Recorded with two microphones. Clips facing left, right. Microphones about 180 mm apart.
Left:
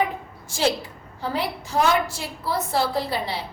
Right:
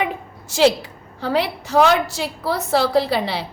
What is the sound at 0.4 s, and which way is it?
A woman's voice, 75° right (ahead or behind).